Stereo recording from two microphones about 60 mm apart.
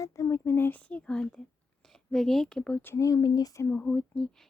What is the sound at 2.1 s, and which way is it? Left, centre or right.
Speech, centre.